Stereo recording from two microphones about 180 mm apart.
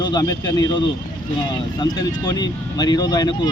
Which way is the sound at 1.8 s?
20° left (ahead or behind).